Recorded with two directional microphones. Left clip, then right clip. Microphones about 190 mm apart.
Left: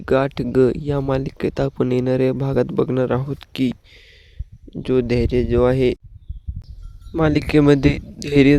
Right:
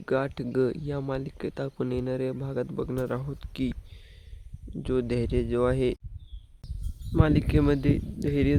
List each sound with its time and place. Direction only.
0.0 s speech: 40° left (ahead or behind)
7.2 s speech: 40° left (ahead or behind)